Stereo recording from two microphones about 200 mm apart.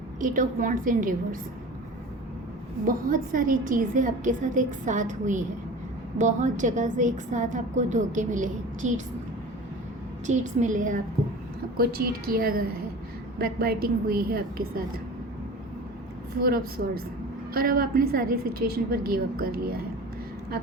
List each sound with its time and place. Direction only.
0.2 s a woman's voice: 40° right (ahead or behind)
2.8 s a woman's voice: 45° right (ahead or behind)
10.2 s a woman's voice: 35° right (ahead or behind)
11.8 s a woman's voice: 50° right (ahead or behind)
16.4 s a woman's voice: 50° right (ahead or behind)